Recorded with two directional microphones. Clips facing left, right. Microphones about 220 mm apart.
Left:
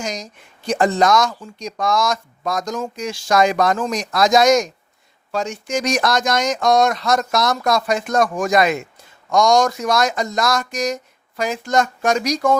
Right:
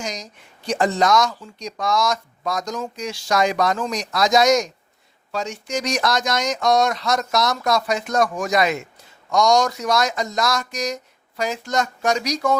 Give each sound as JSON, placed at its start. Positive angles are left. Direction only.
{"t": 0.0, "sound": "speech", "side_deg": 50}